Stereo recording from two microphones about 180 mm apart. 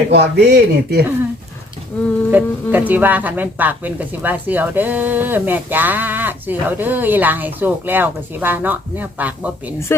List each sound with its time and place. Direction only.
0.1 s speech: 70° right (ahead or behind)
2.3 s speech: 10° right (ahead or behind)